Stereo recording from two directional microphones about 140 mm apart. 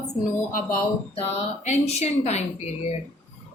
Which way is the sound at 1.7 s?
50° left (ahead or behind).